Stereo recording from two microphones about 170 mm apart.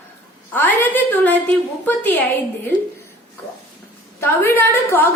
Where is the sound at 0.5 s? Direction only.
10° left (ahead or behind).